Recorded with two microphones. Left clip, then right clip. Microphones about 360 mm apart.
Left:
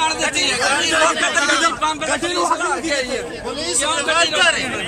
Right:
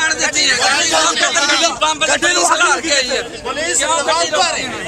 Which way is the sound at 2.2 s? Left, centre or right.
Right.